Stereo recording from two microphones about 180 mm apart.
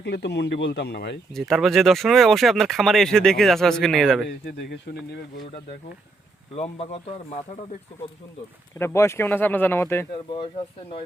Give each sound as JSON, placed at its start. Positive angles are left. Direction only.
{"t": 0.0, "sound": "speech", "side_deg": 70}
{"t": 1.3, "sound": "speech", "side_deg": 0}
{"t": 4.3, "sound": "speech", "side_deg": 65}
{"t": 6.6, "sound": "speech", "side_deg": 35}
{"t": 8.8, "sound": "speech", "side_deg": 15}